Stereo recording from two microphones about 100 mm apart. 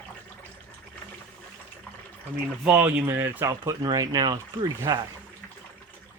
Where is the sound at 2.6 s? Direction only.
15° right (ahead or behind).